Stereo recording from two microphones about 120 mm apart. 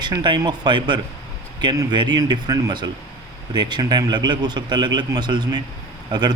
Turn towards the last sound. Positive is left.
turn(degrees=-35)  # may be behind; listen again after turning